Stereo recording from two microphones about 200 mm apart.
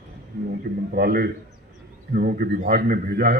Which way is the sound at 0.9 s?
50° right (ahead or behind).